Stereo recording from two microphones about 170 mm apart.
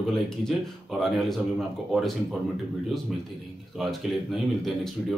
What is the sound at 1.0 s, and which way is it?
A man's voice, centre (ahead or behind).